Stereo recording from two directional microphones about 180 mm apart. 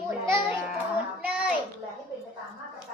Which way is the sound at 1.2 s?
5° right (ahead or behind).